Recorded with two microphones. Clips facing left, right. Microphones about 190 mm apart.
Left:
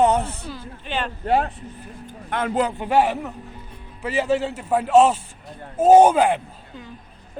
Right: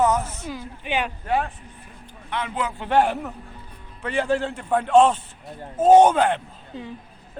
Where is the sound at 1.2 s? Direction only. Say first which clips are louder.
Left 6 dB; 35° left (ahead or behind).